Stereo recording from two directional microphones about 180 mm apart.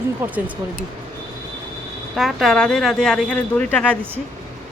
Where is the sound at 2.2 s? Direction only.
Centre (ahead or behind).